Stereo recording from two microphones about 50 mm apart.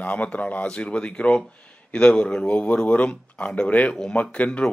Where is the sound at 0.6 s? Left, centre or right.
Left.